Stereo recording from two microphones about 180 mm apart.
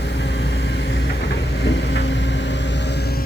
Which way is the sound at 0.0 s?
75° left (ahead or behind).